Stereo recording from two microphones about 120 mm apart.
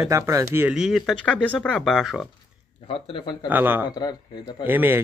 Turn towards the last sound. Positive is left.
turn(degrees=-15)  # may be behind; listen again after turning